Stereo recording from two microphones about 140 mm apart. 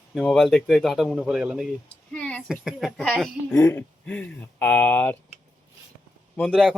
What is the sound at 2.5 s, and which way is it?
Speech, 5° right (ahead or behind).